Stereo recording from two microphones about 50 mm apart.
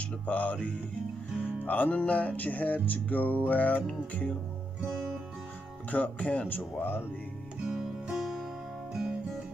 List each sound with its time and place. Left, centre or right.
0.3 s music: left
3.8 s speech: left
5.9 s speech: left
6.5 s speech: left
7.6 s music: centre